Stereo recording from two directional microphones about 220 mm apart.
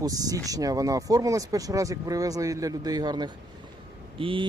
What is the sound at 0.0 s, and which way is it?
Speech, 15° right (ahead or behind).